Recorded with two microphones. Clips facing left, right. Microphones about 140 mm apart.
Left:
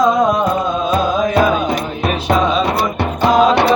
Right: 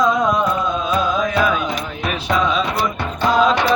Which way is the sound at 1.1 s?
30° left (ahead or behind).